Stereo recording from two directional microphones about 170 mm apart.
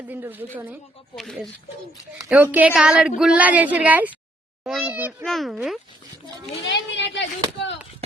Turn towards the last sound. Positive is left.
turn(degrees=90)